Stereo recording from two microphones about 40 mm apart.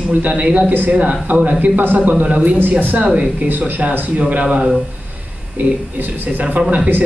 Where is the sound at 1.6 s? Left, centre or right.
Right.